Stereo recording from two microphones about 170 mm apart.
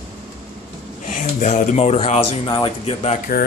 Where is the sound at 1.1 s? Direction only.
50° left (ahead or behind); by 2.9 s 30° left (ahead or behind).